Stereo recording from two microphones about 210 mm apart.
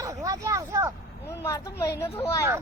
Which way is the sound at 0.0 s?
15° right (ahead or behind).